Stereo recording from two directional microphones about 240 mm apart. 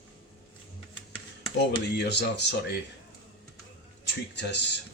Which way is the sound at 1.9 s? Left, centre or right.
Left.